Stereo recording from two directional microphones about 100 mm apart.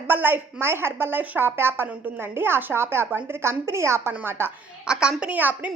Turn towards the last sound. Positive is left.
turn(degrees=-15)  # may be behind; listen again after turning